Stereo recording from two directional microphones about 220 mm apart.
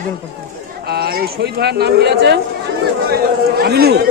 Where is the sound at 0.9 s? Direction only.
45° right (ahead or behind).